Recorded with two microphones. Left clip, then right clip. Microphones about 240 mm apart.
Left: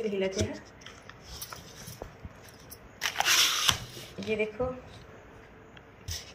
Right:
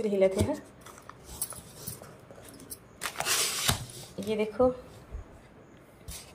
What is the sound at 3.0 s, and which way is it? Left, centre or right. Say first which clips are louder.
Crunch: left 5 dB; centre.